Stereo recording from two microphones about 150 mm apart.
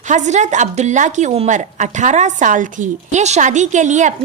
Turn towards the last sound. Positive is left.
turn(degrees=-55)  # may be behind; listen again after turning